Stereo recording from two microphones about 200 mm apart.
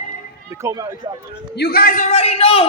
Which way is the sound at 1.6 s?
50° left (ahead or behind).